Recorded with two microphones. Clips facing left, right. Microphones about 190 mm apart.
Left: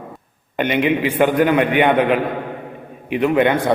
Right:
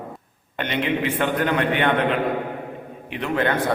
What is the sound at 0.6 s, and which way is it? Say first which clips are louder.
A man's voice: left 6 dB; 10° left (ahead or behind).